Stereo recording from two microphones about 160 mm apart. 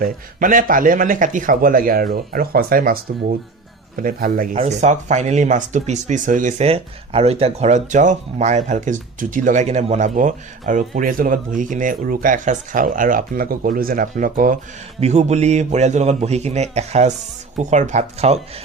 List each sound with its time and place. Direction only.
0.0 s a man's voice: 55° right (ahead or behind)
4.5 s speech: 45° right (ahead or behind)
6.7 s speech: 40° right (ahead or behind); by 14.6 s 55° right (ahead or behind)
15.0 s speech: 45° right (ahead or behind)